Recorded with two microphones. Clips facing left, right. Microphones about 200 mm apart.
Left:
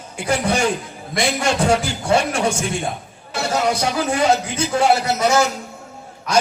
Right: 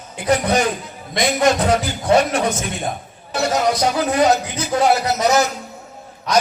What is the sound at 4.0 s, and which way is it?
A man's voice, 30° left (ahead or behind).